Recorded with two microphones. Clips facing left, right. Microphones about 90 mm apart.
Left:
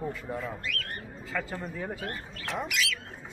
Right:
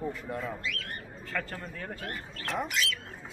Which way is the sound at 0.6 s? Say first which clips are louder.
Left 1 dB; 45° left (ahead or behind).